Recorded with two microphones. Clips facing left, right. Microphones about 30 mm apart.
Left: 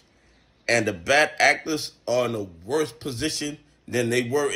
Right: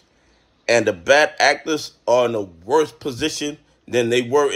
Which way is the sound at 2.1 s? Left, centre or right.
Centre.